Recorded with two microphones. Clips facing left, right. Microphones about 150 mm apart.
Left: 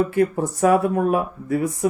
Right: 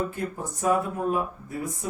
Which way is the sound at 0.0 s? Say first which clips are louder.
Left 11 dB; 70° left (ahead or behind).